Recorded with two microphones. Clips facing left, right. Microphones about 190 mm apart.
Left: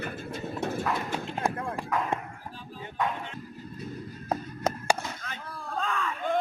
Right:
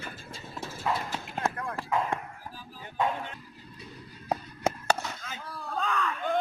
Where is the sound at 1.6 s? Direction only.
25° left (ahead or behind).